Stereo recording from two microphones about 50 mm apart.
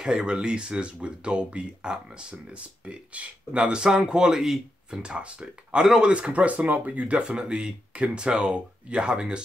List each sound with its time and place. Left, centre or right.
0.0 s speech: centre